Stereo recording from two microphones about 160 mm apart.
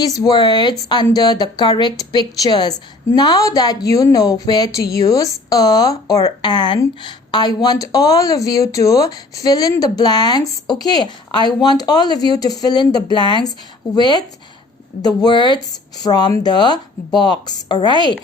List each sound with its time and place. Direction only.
0.0 s a woman's voice: 25° left (ahead or behind)